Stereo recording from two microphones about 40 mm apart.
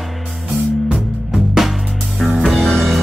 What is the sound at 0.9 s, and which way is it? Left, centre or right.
Music, centre.